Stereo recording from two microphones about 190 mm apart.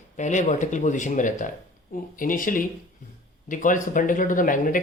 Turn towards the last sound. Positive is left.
turn(degrees=45)  # may be behind; listen again after turning